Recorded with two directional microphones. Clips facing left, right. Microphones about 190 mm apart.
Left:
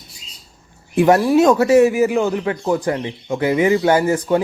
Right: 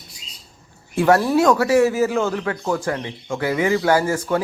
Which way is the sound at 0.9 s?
15° left (ahead or behind).